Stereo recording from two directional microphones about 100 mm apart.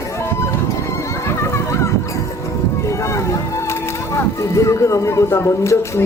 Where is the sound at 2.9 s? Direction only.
30° left (ahead or behind).